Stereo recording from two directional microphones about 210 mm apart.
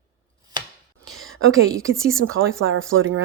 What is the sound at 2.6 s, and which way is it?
Speech, 75° right (ahead or behind).